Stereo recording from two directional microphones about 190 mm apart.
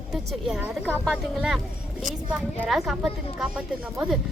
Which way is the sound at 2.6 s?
Centre (ahead or behind).